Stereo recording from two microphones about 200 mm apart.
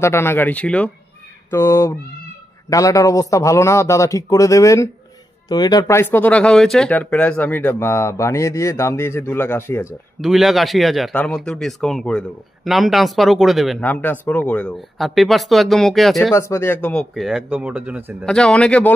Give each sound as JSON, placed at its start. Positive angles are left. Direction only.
{"t": 0.0, "sound": "speech", "side_deg": 10}
{"t": 10.2, "sound": "speech", "side_deg": 0}
{"t": 16.3, "sound": "speech", "side_deg": 15}